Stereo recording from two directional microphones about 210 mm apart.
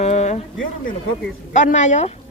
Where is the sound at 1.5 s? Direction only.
35° left (ahead or behind).